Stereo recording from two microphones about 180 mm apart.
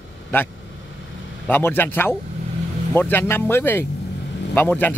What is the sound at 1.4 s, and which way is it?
A man's voice, 10° left (ahead or behind).